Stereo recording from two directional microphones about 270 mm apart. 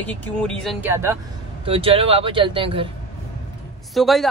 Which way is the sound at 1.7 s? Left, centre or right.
Centre.